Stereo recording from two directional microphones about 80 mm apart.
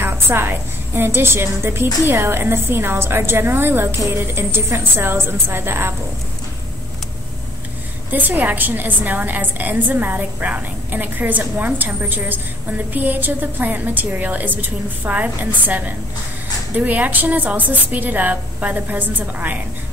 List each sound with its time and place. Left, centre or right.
0.0 s a woman's voice: right
8.1 s a woman's voice: right